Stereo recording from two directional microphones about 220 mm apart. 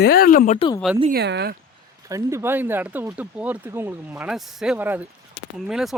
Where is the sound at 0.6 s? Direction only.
20° left (ahead or behind).